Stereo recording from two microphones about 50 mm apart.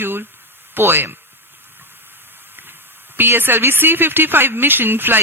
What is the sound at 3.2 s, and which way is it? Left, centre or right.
A woman's voice, right.